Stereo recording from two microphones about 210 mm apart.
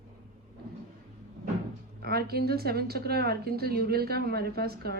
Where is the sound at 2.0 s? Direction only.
50° right (ahead or behind).